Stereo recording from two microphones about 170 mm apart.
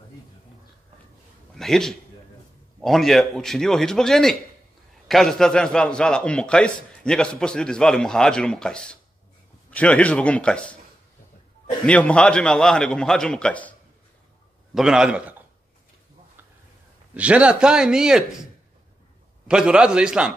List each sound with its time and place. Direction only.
1.5 s a man's voice: centre (ahead or behind)
11.8 s a man's voice: 5° left (ahead or behind)
14.7 s a man's voice: 5° right (ahead or behind)
17.1 s a man's voice: 5° right (ahead or behind)